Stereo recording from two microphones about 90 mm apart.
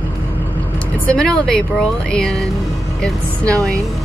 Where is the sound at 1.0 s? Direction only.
10° left (ahead or behind).